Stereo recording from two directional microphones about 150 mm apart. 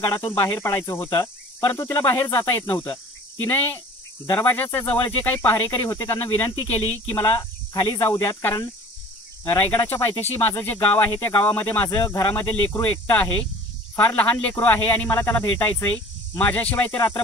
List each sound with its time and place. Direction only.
0.2 s speech: 15° left (ahead or behind)
1.1 s cricket: 20° left (ahead or behind)
1.8 s speech: 20° left (ahead or behind)